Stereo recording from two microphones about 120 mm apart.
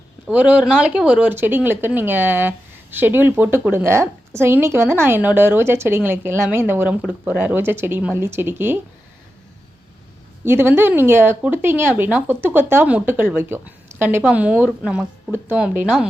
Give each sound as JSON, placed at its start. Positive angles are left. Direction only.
{"t": 0.3, "sound": "a woman's voice", "side_deg": -10}
{"t": 10.4, "sound": "speech", "side_deg": -20}